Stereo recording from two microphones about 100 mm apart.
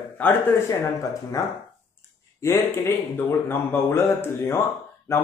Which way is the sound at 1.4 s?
35° left (ahead or behind).